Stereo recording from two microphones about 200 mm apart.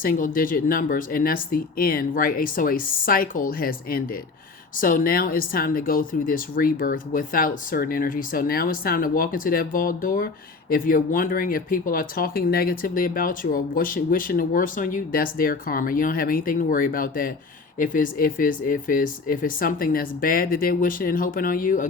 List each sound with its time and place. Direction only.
0.0 s speech: 45° left (ahead or behind)